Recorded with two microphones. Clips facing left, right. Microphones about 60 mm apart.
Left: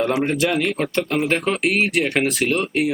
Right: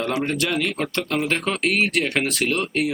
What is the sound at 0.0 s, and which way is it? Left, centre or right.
Speech, centre.